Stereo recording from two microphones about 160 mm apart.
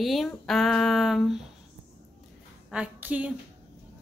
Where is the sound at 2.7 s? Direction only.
10° right (ahead or behind).